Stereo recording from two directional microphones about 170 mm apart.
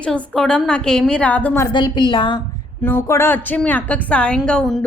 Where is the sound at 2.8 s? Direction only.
15° left (ahead or behind).